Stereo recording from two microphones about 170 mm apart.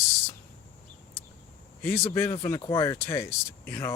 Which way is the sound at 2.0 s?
15° left (ahead or behind).